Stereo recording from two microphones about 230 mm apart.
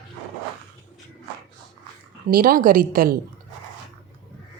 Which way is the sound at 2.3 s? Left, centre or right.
Right.